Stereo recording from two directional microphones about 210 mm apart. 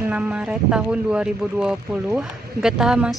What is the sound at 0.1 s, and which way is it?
Speech, 5° right (ahead or behind).